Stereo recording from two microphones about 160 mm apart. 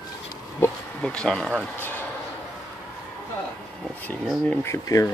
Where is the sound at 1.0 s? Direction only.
5° left (ahead or behind).